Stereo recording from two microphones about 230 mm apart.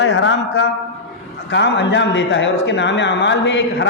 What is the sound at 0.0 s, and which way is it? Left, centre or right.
A man's voice, left.